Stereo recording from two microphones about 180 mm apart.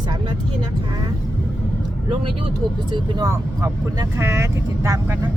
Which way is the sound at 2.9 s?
20° right (ahead or behind).